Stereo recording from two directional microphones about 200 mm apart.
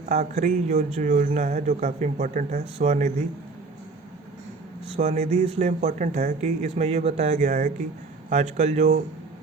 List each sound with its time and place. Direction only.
0.1 s speech: 35° right (ahead or behind)
4.9 s speech: 35° right (ahead or behind)